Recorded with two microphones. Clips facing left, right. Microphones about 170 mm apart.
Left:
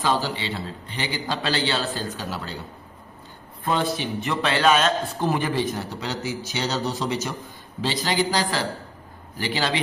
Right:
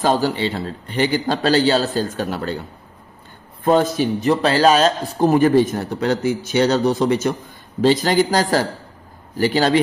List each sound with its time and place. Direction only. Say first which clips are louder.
0.0 s a man's voice: right 7 dB; 50° right (ahead or behind)
3.6 s a man's voice: right 8 dB; 45° right (ahead or behind)